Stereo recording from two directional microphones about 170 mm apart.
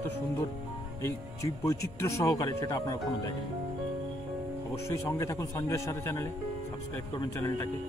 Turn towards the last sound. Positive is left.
turn(degrees=15)  # may be behind; listen again after turning